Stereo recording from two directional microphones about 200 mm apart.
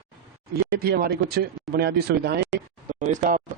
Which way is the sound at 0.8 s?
50° right (ahead or behind).